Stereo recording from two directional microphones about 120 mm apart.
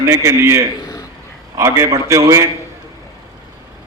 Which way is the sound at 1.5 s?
25° right (ahead or behind).